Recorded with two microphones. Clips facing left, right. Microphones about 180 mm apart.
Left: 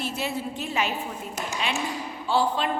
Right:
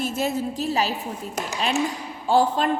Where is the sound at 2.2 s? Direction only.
45° right (ahead or behind).